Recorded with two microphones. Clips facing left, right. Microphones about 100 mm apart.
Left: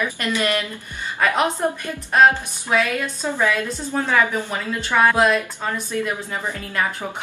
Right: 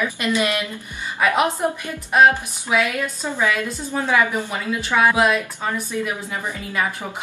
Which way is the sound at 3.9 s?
15° right (ahead or behind).